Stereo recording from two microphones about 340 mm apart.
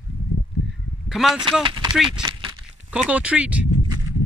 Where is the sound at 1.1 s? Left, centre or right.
Centre.